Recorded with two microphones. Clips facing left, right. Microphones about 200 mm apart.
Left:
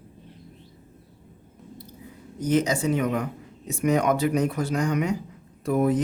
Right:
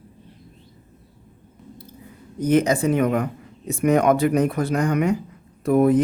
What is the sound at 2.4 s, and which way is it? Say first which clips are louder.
Speech: right 4 dB; 55° right (ahead or behind).